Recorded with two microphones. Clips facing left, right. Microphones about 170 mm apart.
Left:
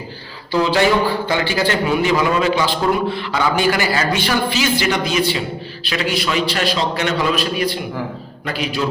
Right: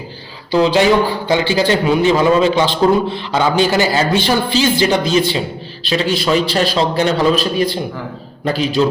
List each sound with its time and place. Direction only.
0.5 s a man's voice: 20° right (ahead or behind)